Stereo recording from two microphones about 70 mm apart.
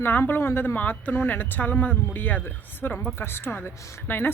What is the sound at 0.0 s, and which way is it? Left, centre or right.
A woman's voice, left.